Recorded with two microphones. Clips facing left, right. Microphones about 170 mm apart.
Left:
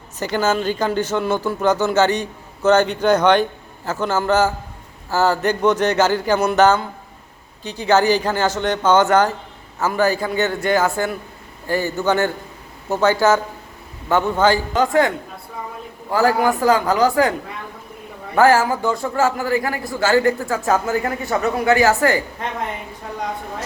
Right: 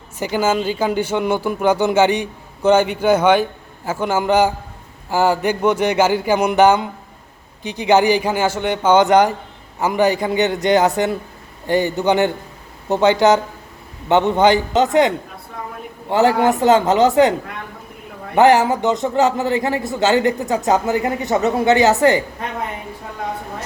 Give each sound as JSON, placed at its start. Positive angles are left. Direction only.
{"t": 0.2, "sound": "a man's voice", "side_deg": -10}
{"t": 18.3, "sound": "a man's voice", "side_deg": -20}